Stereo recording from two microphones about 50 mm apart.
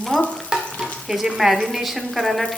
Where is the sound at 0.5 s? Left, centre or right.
Centre.